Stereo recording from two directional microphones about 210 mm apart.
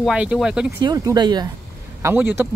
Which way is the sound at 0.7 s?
20° right (ahead or behind).